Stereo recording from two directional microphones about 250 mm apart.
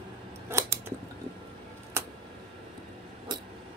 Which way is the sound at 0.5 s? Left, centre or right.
Centre.